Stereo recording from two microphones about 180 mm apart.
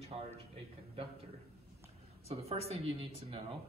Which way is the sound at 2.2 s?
35° right (ahead or behind).